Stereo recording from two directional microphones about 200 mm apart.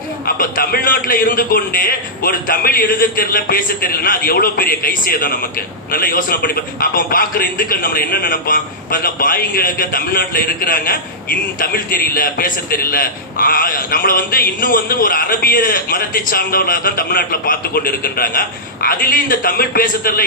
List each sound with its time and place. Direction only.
0.3 s a man's voice: 45° left (ahead or behind)